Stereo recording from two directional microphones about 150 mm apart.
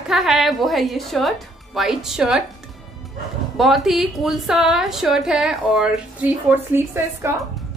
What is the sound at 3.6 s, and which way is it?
A woman's voice, centre (ahead or behind).